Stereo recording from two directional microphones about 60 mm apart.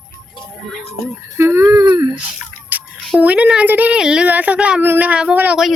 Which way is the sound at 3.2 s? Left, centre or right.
Right.